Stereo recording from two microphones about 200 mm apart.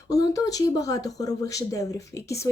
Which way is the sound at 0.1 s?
15° left (ahead or behind).